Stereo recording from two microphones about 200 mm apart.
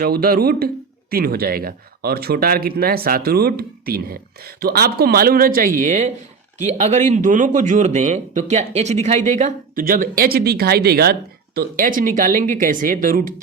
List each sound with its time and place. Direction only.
0.0 s speech: 50° right (ahead or behind)